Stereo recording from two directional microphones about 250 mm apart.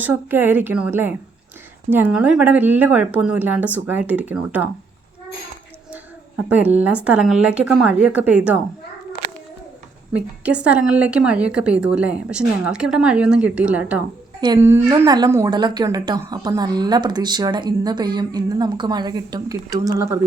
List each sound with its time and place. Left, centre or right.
0.0 s a woman's voice: centre
5.9 s a woman's voice: centre
10.4 s a woman's voice: centre